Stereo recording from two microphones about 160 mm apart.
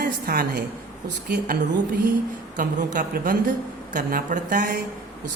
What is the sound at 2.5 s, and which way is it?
Speech, 60° right (ahead or behind).